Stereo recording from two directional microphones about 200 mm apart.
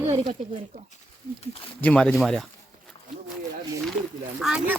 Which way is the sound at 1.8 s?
5° left (ahead or behind).